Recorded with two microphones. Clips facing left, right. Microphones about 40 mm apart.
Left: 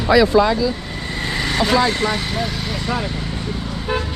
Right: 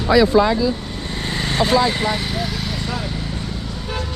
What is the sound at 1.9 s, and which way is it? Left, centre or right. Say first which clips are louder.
Speech: left 1 dB; centre.